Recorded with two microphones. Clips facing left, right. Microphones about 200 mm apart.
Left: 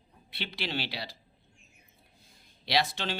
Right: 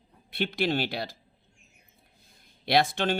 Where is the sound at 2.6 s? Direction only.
50° right (ahead or behind).